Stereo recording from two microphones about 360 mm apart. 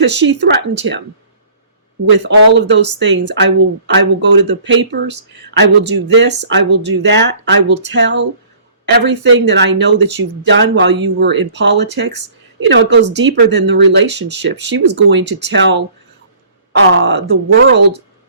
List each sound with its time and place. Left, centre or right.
0.0 s speech: right
2.5 s speech: right